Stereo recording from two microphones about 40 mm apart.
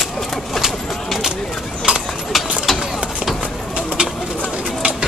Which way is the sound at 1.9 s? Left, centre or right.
Right.